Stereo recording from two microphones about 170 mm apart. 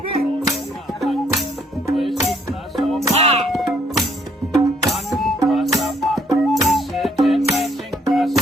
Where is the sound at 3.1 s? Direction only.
40° right (ahead or behind).